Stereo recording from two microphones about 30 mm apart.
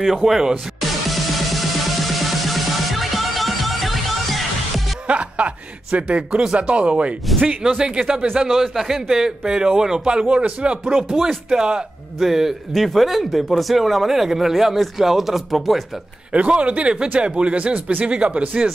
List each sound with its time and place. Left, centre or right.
0.0 s speech: centre
0.7 s music: centre
5.0 s music: right
5.9 s speech: right
6.7 s speech: right
7.6 s speech: right
8.5 s speech: centre; by 11.1 s right
11.1 s speech: centre
16.4 s speech: right
18.4 s speech: right